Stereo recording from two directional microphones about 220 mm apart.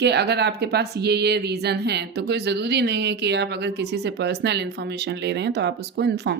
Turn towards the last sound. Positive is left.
turn(degrees=-50)  # may be behind; listen again after turning